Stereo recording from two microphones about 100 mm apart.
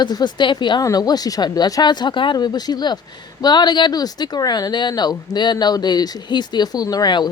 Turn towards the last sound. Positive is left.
turn(degrees=45)  # may be behind; listen again after turning